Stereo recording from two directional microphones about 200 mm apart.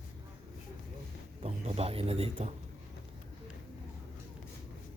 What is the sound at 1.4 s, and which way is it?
Speech, 30° right (ahead or behind).